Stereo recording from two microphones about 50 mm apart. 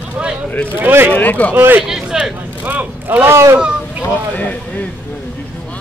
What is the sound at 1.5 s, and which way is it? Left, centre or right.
Speech, right.